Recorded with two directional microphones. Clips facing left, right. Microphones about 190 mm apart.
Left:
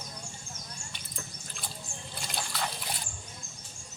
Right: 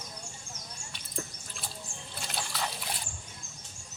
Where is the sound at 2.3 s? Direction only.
5° right (ahead or behind).